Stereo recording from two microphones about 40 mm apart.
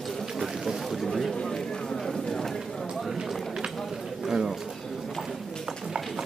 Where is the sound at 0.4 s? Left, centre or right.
Centre.